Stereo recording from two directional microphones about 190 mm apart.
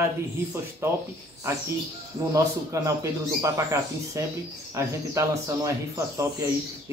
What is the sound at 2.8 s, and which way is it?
Speech, 15° right (ahead or behind).